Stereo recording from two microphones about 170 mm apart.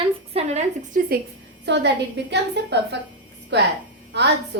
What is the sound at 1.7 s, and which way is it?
A woman's voice, 90° right.